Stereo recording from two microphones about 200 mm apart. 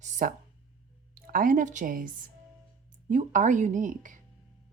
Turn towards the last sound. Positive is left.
turn(degrees=-40)  # may be behind; listen again after turning